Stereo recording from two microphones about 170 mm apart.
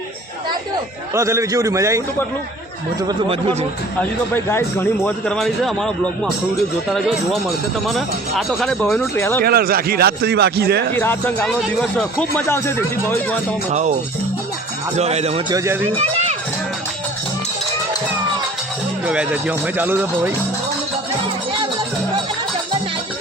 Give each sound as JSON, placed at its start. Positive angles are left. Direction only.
{"t": 1.1, "sound": "speech", "side_deg": -15}
{"t": 3.1, "sound": "speech", "side_deg": -35}
{"t": 4.4, "sound": "a man's voice", "side_deg": 15}
{"t": 7.4, "sound": "a man's voice", "side_deg": 0}
{"t": 8.8, "sound": "speech", "side_deg": 15}
{"t": 9.4, "sound": "a man's voice", "side_deg": -65}
{"t": 10.9, "sound": "speech", "side_deg": 10}
{"t": 12.5, "sound": "speech", "side_deg": 15}
{"t": 13.7, "sound": "speech", "side_deg": -45}
{"t": 14.9, "sound": "speech", "side_deg": -40}
{"t": 15.4, "sound": "speech", "side_deg": -20}
{"t": 16.0, "sound": "music", "side_deg": -40}
{"t": 19.0, "sound": "speech", "side_deg": -5}